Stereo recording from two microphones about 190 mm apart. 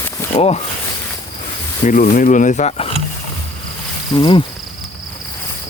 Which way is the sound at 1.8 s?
45° left (ahead or behind).